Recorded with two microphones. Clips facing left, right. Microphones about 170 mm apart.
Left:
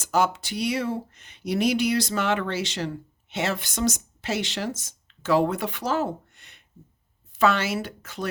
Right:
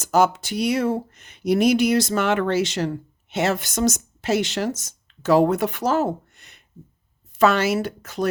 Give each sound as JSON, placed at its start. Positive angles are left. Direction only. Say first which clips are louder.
{"t": 0.0, "sound": "speech", "louder": "right 5 dB", "side_deg": -40}